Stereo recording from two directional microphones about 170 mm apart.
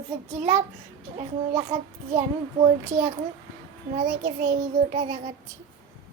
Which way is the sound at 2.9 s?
45° right (ahead or behind).